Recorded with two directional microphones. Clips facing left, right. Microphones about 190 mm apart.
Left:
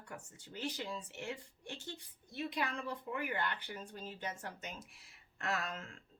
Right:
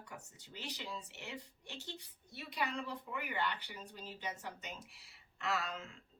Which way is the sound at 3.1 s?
50° left (ahead or behind).